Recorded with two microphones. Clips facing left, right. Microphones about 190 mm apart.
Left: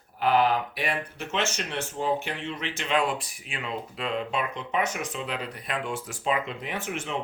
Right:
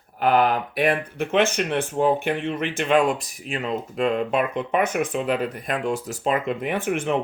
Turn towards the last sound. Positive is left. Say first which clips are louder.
# right 9 dB
turn(degrees=-55)  # may be behind; listen again after turning